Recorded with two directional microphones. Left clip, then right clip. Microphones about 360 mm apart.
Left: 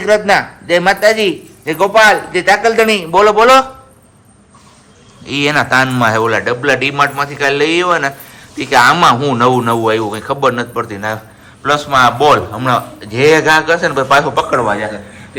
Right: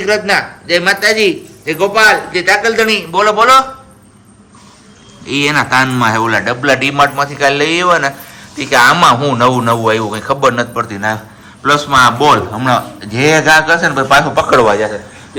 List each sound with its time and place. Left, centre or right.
0.0 s a man's voice: centre
5.2 s a man's voice: centre
14.5 s a man's voice: centre